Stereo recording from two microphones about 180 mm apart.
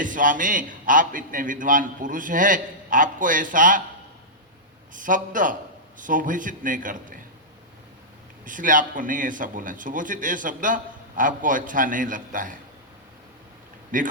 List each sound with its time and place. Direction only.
0.0 s a man's voice: 45° right (ahead or behind)
4.9 s a man's voice: 45° right (ahead or behind)
8.4 s a man's voice: 45° right (ahead or behind)
13.9 s a man's voice: 45° right (ahead or behind)